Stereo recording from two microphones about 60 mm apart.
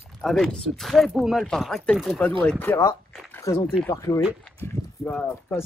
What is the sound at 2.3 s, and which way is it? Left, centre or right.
Speech, left.